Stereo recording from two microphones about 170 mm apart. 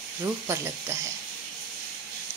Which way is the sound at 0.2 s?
15° right (ahead or behind).